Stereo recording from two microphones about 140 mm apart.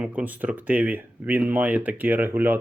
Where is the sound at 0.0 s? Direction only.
10° right (ahead or behind).